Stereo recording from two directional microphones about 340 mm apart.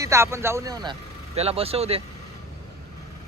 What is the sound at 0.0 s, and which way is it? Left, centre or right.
Speech, centre.